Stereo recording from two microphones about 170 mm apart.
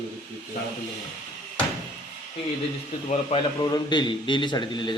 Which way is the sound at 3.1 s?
40° left (ahead or behind).